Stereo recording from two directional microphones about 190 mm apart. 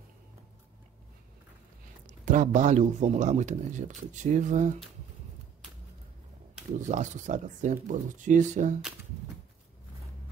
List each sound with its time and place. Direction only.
2.0 s speech: 40° right (ahead or behind)
6.8 s speech: 40° right (ahead or behind)